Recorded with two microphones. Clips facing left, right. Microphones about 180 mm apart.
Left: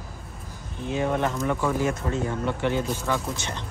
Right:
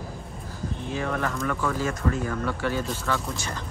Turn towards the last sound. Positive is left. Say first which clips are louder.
# left 1 dB
turn(degrees=20)  # may be behind; listen again after turning